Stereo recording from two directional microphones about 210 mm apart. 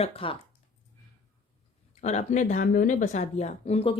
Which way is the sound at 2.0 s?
35° left (ahead or behind).